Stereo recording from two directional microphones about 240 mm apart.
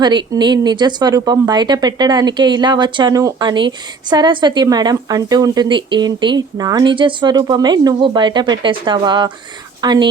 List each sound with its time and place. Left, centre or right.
0.0 s speech: centre